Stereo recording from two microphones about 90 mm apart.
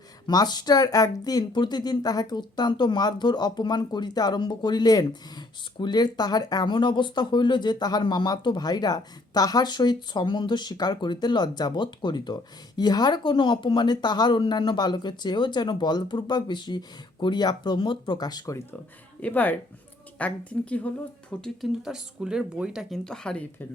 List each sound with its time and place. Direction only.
0.3 s speech: 50° left (ahead or behind)
19.2 s speech: 15° left (ahead or behind)
21.6 s speech: 5° right (ahead or behind)
23.0 s speech: 10° left (ahead or behind)